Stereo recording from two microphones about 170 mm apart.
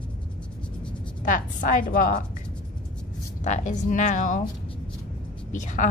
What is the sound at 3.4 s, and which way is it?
A woman's voice, 45° left (ahead or behind).